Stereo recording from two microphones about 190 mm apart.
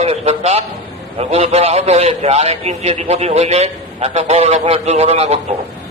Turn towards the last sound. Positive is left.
turn(degrees=-35)  # may be behind; listen again after turning